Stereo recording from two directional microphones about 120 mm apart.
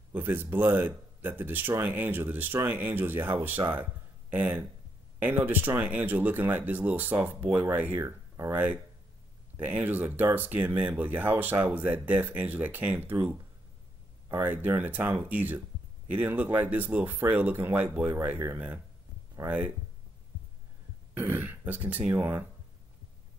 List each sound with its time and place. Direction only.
0.1 s speech: 15° right (ahead or behind)
14.3 s speech: 15° right (ahead or behind)
21.2 s speech: 15° right (ahead or behind)